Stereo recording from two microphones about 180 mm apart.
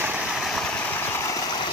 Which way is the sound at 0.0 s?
5° right (ahead or behind).